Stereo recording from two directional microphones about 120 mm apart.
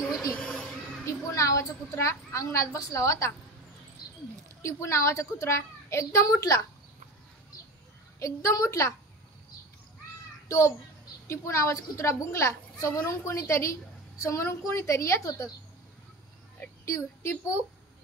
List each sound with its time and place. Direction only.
0.4 s a sound: 10° left (ahead or behind)
1.0 s a woman's voice: 25° left (ahead or behind)
4.6 s a woman's voice: 25° left (ahead or behind)
8.2 s a woman's voice: 25° left (ahead or behind)
11.2 s a woman's voice: 20° left (ahead or behind)
16.8 s a woman's voice: 20° left (ahead or behind)